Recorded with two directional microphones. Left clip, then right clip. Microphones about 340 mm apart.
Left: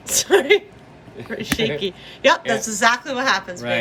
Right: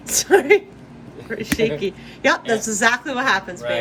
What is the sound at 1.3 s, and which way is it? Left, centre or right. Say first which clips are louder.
A woman's voice: right 1 dB; centre.